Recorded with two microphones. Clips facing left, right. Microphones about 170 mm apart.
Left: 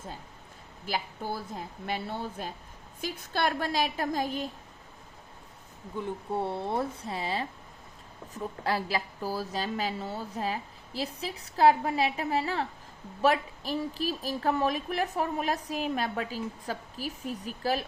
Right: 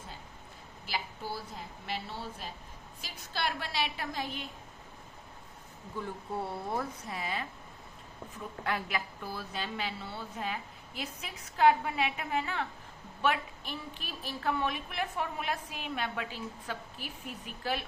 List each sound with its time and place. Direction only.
0.9 s a woman's voice: 50° left (ahead or behind)
6.0 s a woman's voice: 25° left (ahead or behind)
8.6 s a woman's voice: 35° left (ahead or behind)